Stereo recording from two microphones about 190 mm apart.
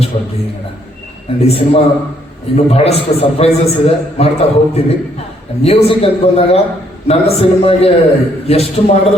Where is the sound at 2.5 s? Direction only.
30° left (ahead or behind).